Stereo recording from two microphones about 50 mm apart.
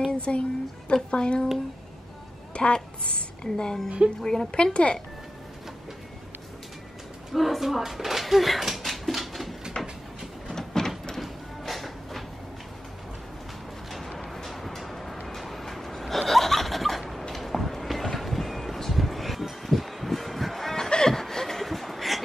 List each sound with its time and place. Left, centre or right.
0.3 s speech: centre
2.5 s a woman's voice: left
7.3 s speech: centre
10.5 s a sound: centre
11.1 s music: centre
13.8 s music: centre
15.2 s a sound: centre
17.4 s music: centre